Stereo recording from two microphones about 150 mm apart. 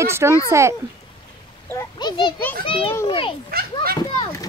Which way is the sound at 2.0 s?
30° left (ahead or behind).